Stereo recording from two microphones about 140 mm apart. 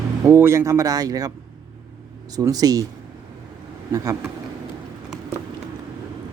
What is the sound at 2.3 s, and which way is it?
Speech, 25° right (ahead or behind).